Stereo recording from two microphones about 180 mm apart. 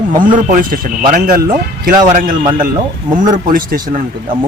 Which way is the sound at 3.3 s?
50° right (ahead or behind).